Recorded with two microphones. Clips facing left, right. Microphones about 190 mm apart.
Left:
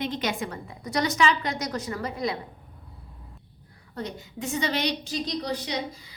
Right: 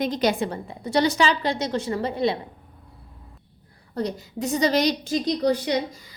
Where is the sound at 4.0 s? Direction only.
35° right (ahead or behind).